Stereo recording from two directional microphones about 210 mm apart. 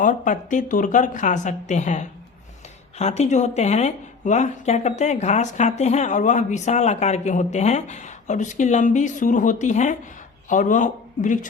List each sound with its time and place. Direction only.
0.0 s speech: 40° left (ahead or behind)